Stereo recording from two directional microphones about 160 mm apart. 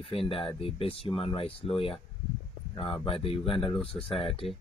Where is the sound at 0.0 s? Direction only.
35° left (ahead or behind).